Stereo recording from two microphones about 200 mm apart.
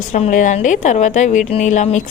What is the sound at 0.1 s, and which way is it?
A woman's voice, 40° left (ahead or behind).